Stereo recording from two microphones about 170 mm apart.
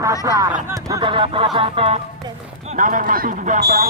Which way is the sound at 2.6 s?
45° right (ahead or behind).